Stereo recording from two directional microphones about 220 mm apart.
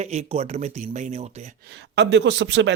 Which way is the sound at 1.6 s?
50° right (ahead or behind).